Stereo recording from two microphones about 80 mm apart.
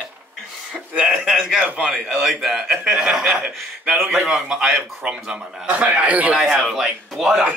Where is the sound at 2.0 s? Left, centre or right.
Centre.